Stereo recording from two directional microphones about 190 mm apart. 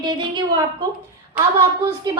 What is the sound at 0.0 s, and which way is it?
A woman's voice, 25° right (ahead or behind).